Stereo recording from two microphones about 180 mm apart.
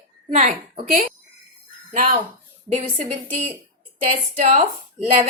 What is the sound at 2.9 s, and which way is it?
A woman's voice, 40° right (ahead or behind).